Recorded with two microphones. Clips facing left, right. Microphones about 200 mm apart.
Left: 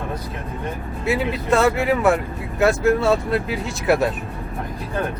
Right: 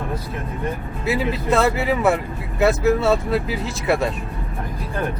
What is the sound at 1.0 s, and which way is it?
Speech, centre (ahead or behind).